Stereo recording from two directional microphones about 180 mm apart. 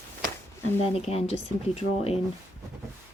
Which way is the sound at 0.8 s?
35° left (ahead or behind).